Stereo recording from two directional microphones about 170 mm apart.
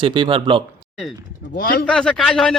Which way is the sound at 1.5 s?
60° left (ahead or behind).